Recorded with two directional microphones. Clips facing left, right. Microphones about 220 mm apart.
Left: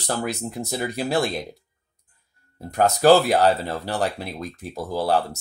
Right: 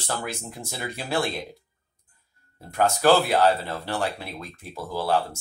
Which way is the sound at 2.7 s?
40° left (ahead or behind).